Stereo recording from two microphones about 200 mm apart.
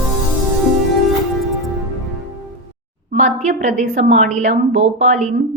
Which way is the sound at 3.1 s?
35° right (ahead or behind).